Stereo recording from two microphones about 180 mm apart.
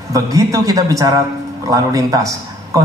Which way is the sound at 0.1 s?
20° right (ahead or behind).